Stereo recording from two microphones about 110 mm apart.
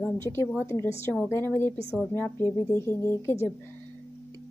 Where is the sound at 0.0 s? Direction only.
20° left (ahead or behind).